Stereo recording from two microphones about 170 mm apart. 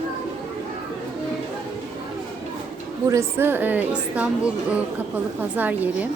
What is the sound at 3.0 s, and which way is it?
A woman's voice, 15° right (ahead or behind).